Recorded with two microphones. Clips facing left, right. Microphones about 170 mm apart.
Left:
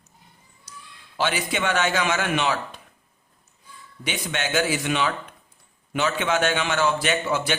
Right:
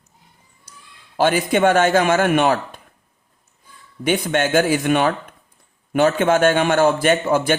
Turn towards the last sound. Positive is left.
turn(degrees=-50)  # may be behind; listen again after turning